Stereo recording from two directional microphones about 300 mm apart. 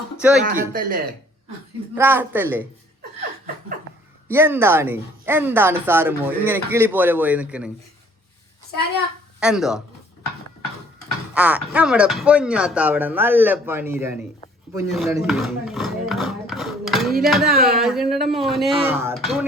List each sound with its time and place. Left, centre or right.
0.2 s speech: centre
0.4 s speech: right
2.0 s speech: centre
4.3 s speech: centre
9.4 s speech: centre
11.3 s speech: centre
17.4 s speech: right
17.7 s speech: centre